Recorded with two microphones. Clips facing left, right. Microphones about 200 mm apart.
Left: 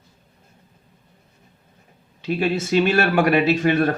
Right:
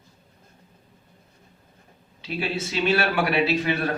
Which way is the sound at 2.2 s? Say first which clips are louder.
Left 7 dB; 45° left (ahead or behind).